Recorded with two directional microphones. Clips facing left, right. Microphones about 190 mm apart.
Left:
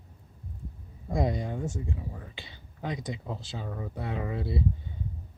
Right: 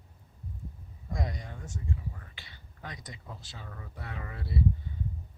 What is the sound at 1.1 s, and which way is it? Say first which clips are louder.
Speech: left 9 dB; 25° left (ahead or behind).